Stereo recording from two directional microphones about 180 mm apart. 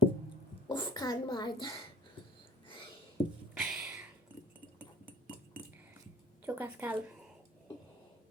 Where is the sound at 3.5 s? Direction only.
5° right (ahead or behind).